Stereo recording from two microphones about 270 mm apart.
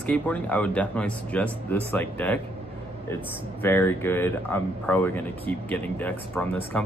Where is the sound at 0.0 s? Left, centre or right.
Centre.